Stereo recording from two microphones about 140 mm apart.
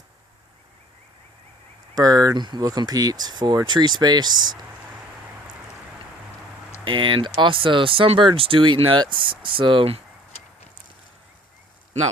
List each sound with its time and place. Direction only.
2.0 s speech: 25° right (ahead or behind)
6.8 s speech: 35° right (ahead or behind)